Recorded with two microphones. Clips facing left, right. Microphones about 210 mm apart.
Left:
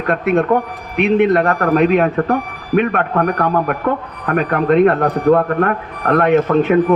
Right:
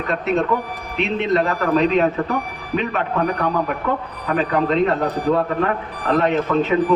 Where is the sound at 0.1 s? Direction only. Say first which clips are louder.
Left 6 dB; 55° left (ahead or behind).